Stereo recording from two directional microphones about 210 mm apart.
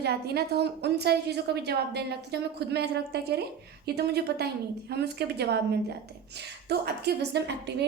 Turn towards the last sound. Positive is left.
turn(degrees=-55)  # may be behind; listen again after turning